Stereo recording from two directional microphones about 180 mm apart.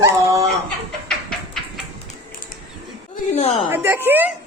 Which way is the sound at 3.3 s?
35° left (ahead or behind).